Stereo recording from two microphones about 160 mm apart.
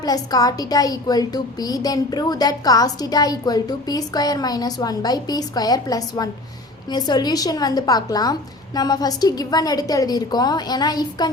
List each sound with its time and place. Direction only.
0.0 s a woman's voice: 25° left (ahead or behind)